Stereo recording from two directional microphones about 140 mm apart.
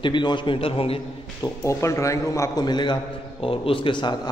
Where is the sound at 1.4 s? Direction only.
20° left (ahead or behind).